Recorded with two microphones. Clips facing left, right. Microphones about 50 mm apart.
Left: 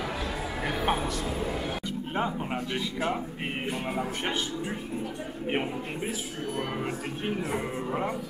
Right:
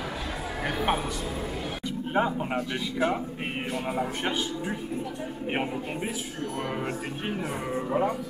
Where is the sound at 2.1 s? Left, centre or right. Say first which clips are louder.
Right 4 dB; centre.